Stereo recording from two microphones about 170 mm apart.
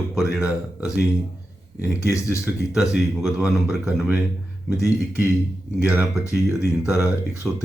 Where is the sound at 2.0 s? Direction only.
15° left (ahead or behind).